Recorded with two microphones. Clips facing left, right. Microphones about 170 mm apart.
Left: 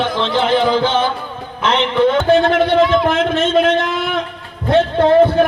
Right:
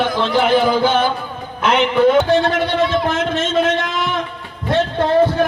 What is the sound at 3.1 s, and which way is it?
A man's voice, 60° left (ahead or behind).